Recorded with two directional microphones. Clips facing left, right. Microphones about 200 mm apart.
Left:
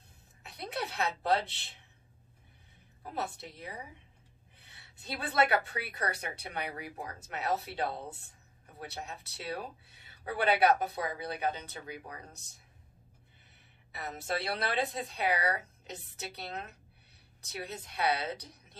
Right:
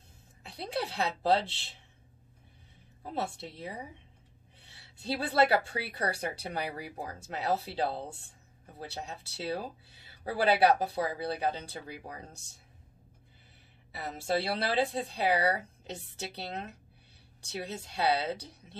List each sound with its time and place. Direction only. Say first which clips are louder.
0.4 s a woman's voice: right 3 dB; 30° right (ahead or behind)
3.0 s speech: right 3 dB; 25° right (ahead or behind)
13.9 s speech: right 4 dB; 30° right (ahead or behind)